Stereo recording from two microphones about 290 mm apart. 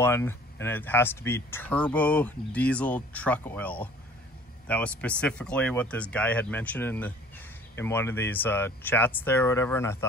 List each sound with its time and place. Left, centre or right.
0.0 s speech: centre